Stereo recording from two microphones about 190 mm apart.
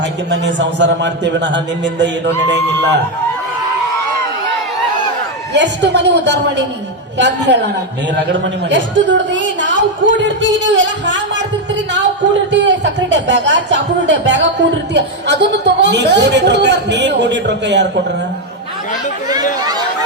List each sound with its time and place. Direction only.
0.0 s a woman's voice: 70° right (ahead or behind)
5.5 s a woman's voice: 65° right (ahead or behind)